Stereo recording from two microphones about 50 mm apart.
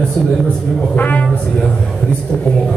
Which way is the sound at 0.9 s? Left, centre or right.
Left.